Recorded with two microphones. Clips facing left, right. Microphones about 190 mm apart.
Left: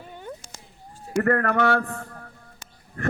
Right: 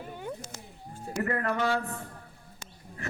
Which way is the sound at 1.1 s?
60° left (ahead or behind).